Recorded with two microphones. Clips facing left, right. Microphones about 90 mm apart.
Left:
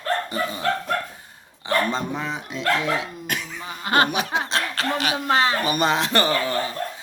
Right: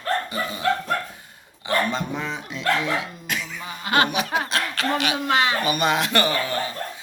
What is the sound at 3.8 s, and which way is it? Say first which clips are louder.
Speech: left 1 dB; 40° left (ahead or behind).